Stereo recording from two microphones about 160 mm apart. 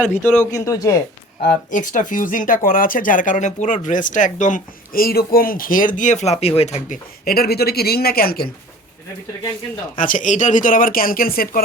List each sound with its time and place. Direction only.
0.2 s speech: 15° left (ahead or behind)
1.7 s speech: 55° left (ahead or behind); by 8.4 s 70° left (ahead or behind)
10.0 s speech: 55° left (ahead or behind)